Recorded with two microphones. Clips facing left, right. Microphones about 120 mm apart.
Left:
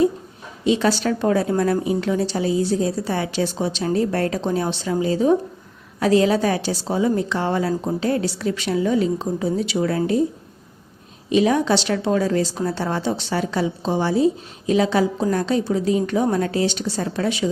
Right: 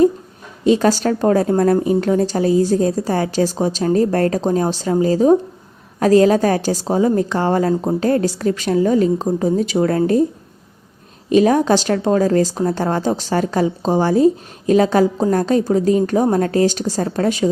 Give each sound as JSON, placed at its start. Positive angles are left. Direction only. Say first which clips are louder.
{"t": 0.6, "sound": "a woman's voice", "louder": "right 4 dB", "side_deg": -45}
{"t": 7.7, "sound": "a woman's voice", "louder": "right 5 dB", "side_deg": -30}
{"t": 7.9, "sound": "a woman's voice", "louder": "right 5 dB", "side_deg": -45}
{"t": 11.3, "sound": "a woman's voice", "louder": "right 4 dB", "side_deg": -45}